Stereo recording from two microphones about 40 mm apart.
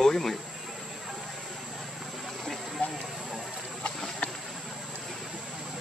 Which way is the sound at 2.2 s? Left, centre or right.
Centre.